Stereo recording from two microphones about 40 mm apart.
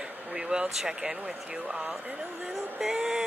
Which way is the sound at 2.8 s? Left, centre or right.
Centre.